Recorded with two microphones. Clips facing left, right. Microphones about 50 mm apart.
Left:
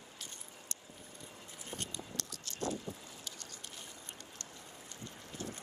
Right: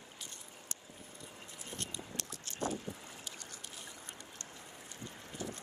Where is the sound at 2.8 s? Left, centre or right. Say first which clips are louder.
Even; right.